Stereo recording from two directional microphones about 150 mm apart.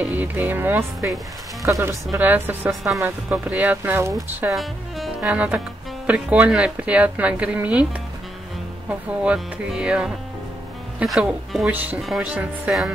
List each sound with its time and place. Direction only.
0.0 s speech: 10° right (ahead or behind)
2.7 s speech: centre (ahead or behind)
4.5 s speech: centre (ahead or behind)
8.8 s speech: 5° right (ahead or behind)